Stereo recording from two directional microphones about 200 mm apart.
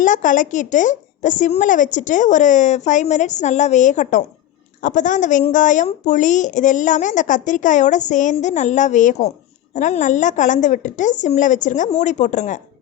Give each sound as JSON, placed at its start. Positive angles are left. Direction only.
{"t": 0.0, "sound": "a woman's voice", "side_deg": 40}